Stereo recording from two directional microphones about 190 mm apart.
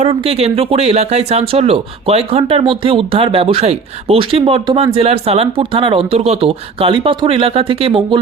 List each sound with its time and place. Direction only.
0.0 s speech: 30° right (ahead or behind)